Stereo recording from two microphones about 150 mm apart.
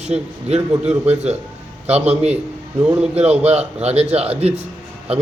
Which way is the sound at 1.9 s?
45° right (ahead or behind).